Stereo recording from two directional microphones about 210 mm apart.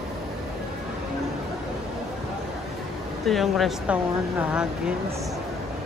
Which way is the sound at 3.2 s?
Centre (ahead or behind).